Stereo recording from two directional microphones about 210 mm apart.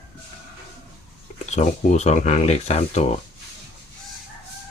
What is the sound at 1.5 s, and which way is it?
Speech, 35° left (ahead or behind).